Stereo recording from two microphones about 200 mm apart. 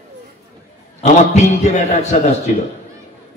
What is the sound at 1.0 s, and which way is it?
A man's voice, 35° left (ahead or behind).